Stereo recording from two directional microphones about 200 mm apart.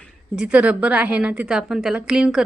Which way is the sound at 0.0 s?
5° right (ahead or behind).